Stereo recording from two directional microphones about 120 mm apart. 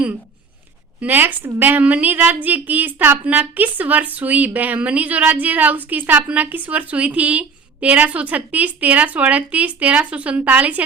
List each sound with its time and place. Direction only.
1.0 s a woman's voice: 15° right (ahead or behind)